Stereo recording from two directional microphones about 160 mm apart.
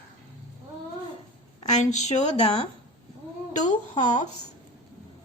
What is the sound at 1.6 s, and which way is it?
Speech, 45° left (ahead or behind).